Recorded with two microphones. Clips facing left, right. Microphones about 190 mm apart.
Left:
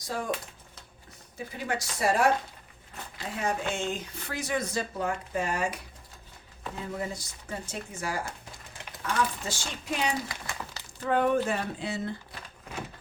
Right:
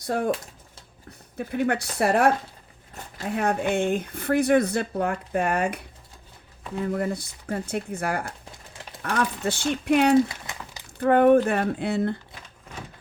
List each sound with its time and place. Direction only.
0.0 s speech: 60° right (ahead or behind)
1.4 s speech: 60° right (ahead or behind)
6.8 s speech: 60° right (ahead or behind)
10.5 s crumpling: 20° right (ahead or behind)
11.0 s speech: 55° right (ahead or behind)